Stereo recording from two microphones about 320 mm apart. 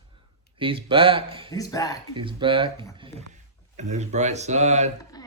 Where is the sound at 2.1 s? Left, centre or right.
Centre.